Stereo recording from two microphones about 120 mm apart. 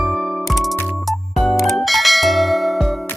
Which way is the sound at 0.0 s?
Centre (ahead or behind).